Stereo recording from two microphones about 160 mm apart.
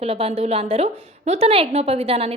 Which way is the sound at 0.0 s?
40° right (ahead or behind).